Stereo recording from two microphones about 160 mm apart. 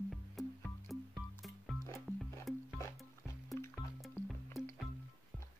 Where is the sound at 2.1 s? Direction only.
10° right (ahead or behind).